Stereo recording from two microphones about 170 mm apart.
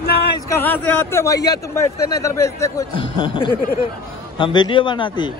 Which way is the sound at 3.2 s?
30° left (ahead or behind).